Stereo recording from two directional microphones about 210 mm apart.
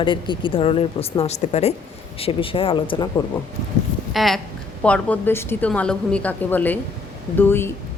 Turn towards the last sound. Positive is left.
turn(degrees=10)  # may be behind; listen again after turning